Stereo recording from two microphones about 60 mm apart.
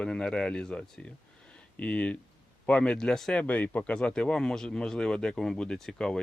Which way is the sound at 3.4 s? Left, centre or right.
Left.